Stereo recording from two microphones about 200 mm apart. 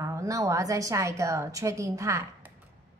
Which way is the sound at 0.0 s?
15° right (ahead or behind).